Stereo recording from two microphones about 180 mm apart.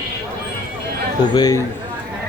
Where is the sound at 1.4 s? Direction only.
20° left (ahead or behind).